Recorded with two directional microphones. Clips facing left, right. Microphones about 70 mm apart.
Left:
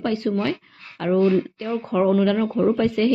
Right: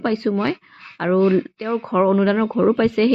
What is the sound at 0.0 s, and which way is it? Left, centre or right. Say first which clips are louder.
Speech: right 3 dB; right.